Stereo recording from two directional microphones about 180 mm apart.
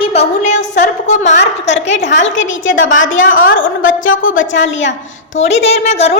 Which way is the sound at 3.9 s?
90° left.